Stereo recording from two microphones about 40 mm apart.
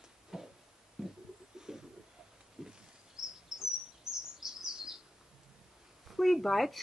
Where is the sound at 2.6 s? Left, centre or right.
Centre.